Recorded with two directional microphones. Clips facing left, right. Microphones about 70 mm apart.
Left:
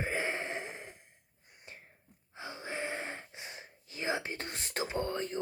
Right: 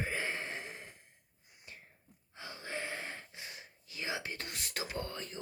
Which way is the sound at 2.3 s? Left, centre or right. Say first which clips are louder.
Left 3 dB; left.